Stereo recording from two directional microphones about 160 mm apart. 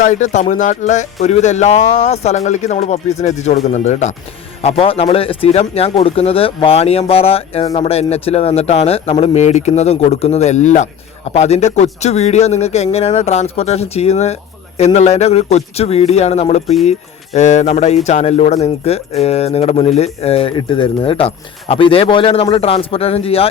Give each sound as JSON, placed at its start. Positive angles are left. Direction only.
{"t": 0.0, "sound": "a man's voice", "side_deg": 50}